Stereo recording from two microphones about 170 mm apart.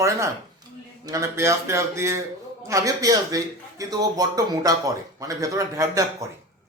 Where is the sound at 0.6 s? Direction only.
25° right (ahead or behind).